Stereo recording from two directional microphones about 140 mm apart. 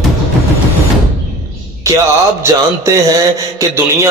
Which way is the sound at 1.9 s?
20° right (ahead or behind).